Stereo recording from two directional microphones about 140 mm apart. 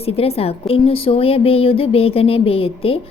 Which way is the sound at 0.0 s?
45° left (ahead or behind).